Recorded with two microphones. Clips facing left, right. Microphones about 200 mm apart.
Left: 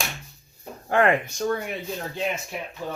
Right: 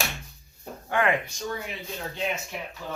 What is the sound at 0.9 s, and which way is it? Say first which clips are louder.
Speech: left 4 dB; 45° left (ahead or behind).